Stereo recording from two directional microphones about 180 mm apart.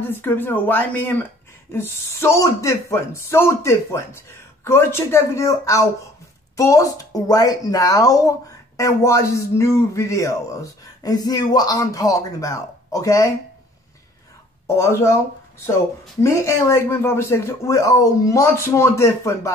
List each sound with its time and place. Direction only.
0.1 s speech: 10° left (ahead or behind)
14.7 s speech: 15° left (ahead or behind)
16.2 s speech: 15° left (ahead or behind)